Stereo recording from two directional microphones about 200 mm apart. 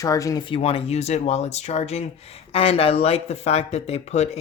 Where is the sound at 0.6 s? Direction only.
30° left (ahead or behind).